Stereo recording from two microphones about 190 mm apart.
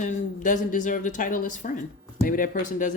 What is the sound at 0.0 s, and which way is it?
Speech, 40° left (ahead or behind).